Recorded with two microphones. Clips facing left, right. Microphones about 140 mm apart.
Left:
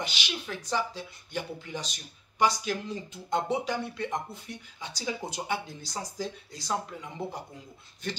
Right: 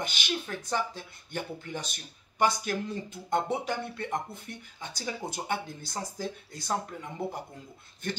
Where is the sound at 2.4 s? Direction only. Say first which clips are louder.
Even; 50° right (ahead or behind).